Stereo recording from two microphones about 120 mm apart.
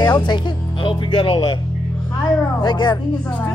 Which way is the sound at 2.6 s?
35° left (ahead or behind).